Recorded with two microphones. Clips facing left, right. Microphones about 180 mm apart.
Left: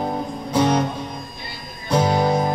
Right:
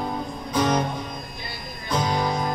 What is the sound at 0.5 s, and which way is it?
Music, 30° left (ahead or behind).